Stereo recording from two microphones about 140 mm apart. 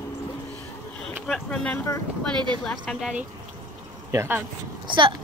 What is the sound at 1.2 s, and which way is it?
Speech, 5° left (ahead or behind).